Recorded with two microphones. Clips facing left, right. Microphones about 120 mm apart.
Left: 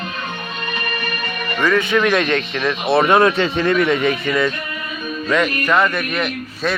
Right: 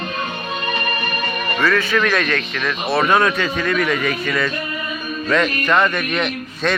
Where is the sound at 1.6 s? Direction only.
20° left (ahead or behind).